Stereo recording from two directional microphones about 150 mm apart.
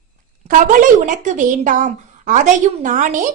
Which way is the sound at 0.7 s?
60° right (ahead or behind).